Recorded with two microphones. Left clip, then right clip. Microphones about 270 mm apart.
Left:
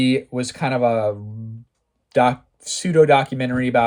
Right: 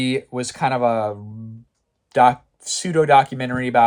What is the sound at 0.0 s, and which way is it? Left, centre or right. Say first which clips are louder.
Speech: left 2 dB; centre.